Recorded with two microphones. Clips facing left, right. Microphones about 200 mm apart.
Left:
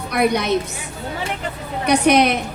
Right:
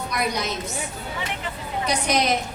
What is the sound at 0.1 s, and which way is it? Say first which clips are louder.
Speech: left 9 dB; 60° left (ahead or behind).